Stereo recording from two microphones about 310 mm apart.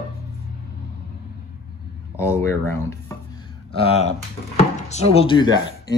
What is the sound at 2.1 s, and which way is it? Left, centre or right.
Speech, centre.